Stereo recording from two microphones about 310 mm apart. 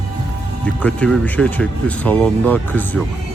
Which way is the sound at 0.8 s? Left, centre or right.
Centre.